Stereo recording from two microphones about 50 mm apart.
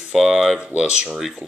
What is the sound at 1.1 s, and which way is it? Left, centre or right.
Speech, centre.